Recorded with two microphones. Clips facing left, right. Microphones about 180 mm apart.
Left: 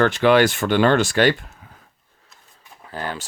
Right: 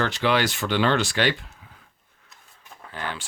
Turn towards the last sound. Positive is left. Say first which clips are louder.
# left 4 dB
turn(degrees=40)  # may be behind; listen again after turning